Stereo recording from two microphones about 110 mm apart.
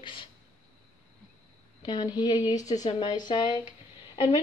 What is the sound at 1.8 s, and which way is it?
A woman's voice, 40° left (ahead or behind).